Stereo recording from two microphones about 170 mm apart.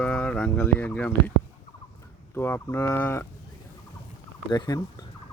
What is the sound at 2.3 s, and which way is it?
Speech, 15° left (ahead or behind).